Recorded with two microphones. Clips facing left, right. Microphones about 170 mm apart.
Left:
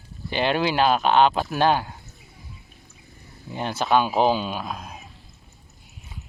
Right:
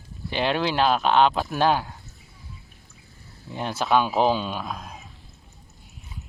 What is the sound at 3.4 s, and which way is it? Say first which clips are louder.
Speech: left 1 dB; centre (ahead or behind).